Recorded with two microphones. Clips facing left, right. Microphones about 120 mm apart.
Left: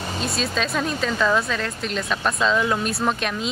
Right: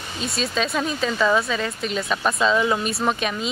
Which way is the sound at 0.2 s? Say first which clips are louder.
Right 2 dB; centre (ahead or behind).